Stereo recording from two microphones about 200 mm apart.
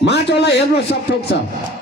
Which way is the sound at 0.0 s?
60° left (ahead or behind).